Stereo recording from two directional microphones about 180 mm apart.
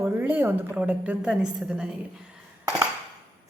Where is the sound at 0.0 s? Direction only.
10° right (ahead or behind).